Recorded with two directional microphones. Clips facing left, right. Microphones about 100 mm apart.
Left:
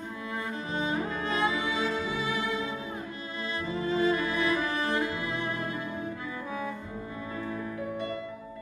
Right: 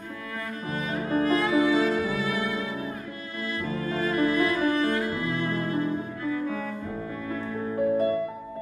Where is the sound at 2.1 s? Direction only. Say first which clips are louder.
Right 3 dB; 25° left (ahead or behind).